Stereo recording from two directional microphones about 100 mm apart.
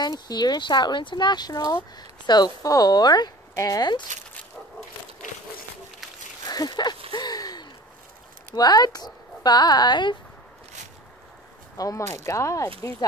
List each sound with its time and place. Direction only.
0.0 s speech: 45° left (ahead or behind)
6.4 s speech: 40° left (ahead or behind)
7.1 s gasp: 45° left (ahead or behind)
8.5 s speech: 40° left (ahead or behind)
11.7 s speech: 35° left (ahead or behind)